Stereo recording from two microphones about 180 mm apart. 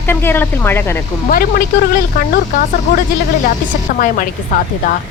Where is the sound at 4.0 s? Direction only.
50° left (ahead or behind).